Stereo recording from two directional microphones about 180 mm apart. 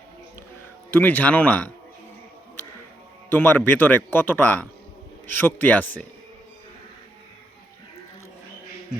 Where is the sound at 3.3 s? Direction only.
10° left (ahead or behind).